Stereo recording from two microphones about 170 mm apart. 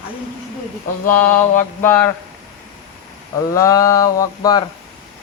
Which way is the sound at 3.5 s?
20° left (ahead or behind).